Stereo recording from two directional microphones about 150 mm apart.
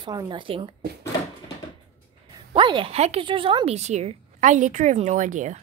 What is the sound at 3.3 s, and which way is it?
A woman's voice, 35° right (ahead or behind).